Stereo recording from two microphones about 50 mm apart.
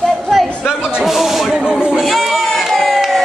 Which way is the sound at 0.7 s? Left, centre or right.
Centre.